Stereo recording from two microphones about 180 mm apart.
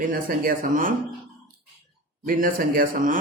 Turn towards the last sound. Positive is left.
turn(degrees=-50)  # may be behind; listen again after turning